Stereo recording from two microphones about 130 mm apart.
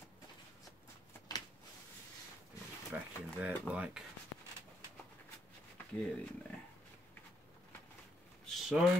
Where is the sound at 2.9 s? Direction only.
15° right (ahead or behind).